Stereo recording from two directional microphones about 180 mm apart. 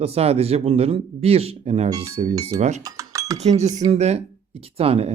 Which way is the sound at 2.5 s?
20° right (ahead or behind).